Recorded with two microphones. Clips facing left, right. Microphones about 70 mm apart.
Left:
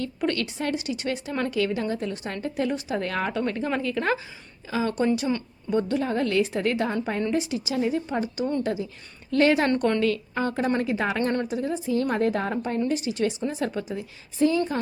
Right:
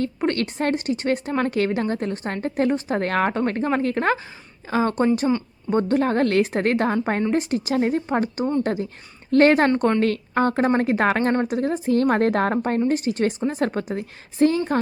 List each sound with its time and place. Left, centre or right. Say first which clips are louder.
0.0 s speech: right 4 dB; right